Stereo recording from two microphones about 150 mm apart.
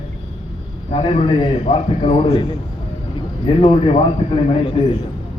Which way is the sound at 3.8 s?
40° left (ahead or behind).